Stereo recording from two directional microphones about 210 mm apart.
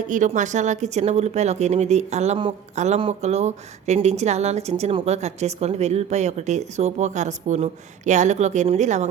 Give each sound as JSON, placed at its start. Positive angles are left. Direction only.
{"t": 0.1, "sound": "speech", "side_deg": -35}